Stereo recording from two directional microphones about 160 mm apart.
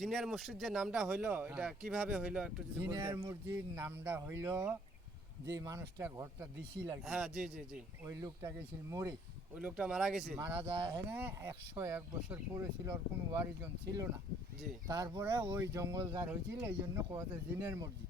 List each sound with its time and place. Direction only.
0.0 s speech: centre (ahead or behind); by 6.5 s 20° right (ahead or behind)
7.0 s speech: 5° right (ahead or behind)
8.0 s speech: 20° right (ahead or behind)
9.6 s speech: 5° right (ahead or behind)
10.3 s speech: 15° right (ahead or behind)